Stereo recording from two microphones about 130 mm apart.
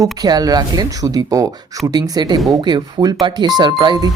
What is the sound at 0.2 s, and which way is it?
Speech, 30° right (ahead or behind).